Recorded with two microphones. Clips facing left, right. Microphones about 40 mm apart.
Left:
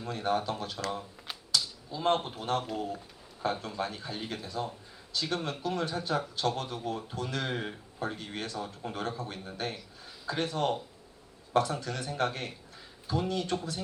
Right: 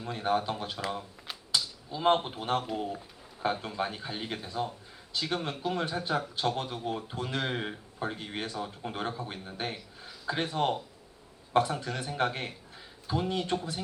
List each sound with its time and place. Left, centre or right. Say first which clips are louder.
0.0 s speech: right 1 dB; centre